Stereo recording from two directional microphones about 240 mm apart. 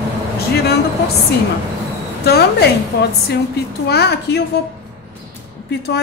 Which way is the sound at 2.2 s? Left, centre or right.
Left.